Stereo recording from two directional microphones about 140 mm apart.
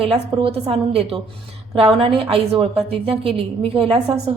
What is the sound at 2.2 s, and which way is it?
A woman's voice, 45° right (ahead or behind).